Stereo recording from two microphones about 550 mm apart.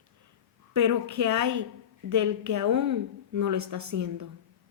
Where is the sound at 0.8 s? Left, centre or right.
Right.